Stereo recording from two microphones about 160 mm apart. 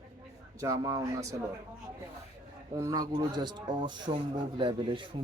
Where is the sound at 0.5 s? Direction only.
20° right (ahead or behind).